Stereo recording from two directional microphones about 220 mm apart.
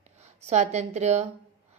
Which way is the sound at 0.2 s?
30° right (ahead or behind).